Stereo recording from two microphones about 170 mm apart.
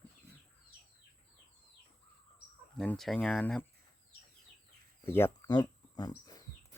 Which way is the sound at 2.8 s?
5° left (ahead or behind).